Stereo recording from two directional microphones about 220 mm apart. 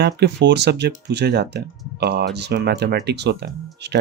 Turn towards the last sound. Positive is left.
turn(degrees=-50)  # may be behind; listen again after turning